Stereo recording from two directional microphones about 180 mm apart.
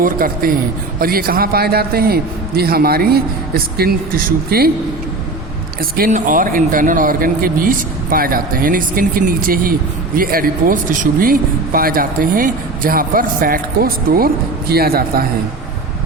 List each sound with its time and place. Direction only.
0.0 s a man's voice: 50° right (ahead or behind)
6.0 s a man's voice: 45° right (ahead or behind)